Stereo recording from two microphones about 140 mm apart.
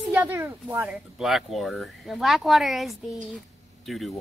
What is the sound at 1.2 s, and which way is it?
Speech, centre (ahead or behind).